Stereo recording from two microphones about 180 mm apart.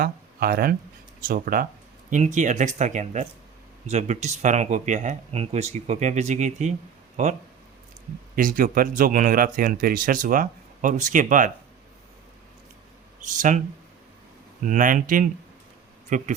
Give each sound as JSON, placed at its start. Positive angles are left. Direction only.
{"t": 0.0, "sound": "speech", "side_deg": -55}
{"t": 8.4, "sound": "speech", "side_deg": -50}
{"t": 13.1, "sound": "speech", "side_deg": -45}
{"t": 14.6, "sound": "speech", "side_deg": -45}